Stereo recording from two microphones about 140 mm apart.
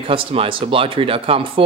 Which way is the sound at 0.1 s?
40° right (ahead or behind).